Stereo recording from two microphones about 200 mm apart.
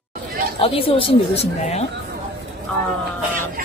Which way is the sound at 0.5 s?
30° left (ahead or behind).